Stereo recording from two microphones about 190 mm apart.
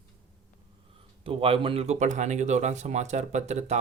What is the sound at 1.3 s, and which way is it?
Speech, 30° right (ahead or behind).